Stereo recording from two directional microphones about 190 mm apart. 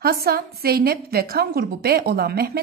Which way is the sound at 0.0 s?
55° right (ahead or behind).